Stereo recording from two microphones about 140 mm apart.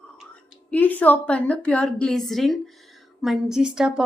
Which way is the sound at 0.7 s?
10° left (ahead or behind).